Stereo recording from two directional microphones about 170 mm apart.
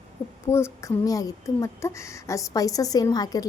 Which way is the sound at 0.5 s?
15° left (ahead or behind).